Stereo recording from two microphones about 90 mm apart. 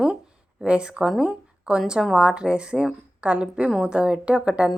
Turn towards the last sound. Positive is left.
turn(degrees=-15)  # may be behind; listen again after turning